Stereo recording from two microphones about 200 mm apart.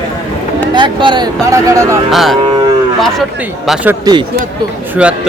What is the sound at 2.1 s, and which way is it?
Speech, centre (ahead or behind).